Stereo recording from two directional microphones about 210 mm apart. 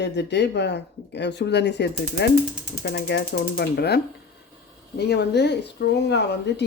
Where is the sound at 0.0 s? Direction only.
55° left (ahead or behind).